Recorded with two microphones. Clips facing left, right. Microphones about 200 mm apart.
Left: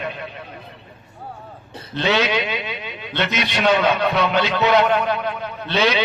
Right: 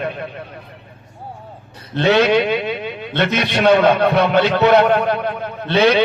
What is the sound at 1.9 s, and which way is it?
A man's voice, 55° right (ahead or behind).